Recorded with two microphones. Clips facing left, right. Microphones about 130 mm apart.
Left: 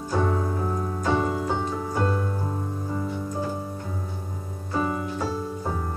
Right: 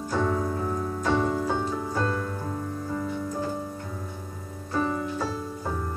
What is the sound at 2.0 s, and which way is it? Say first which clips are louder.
Music: left 3 dB; 20° left (ahead or behind).